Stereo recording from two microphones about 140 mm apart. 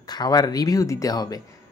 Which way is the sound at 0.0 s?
30° left (ahead or behind).